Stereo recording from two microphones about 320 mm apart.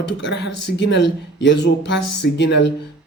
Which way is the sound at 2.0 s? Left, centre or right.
Left.